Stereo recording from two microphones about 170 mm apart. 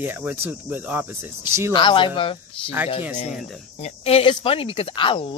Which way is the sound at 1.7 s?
30° left (ahead or behind).